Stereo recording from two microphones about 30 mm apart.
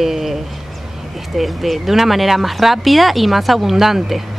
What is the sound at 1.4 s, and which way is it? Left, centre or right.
Speech, centre.